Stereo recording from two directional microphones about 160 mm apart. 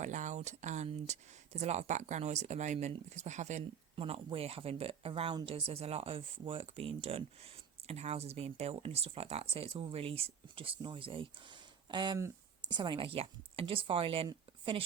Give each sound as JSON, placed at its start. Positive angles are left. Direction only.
{"t": 0.0, "sound": "speech", "side_deg": -50}
{"t": 3.9, "sound": "speech", "side_deg": -35}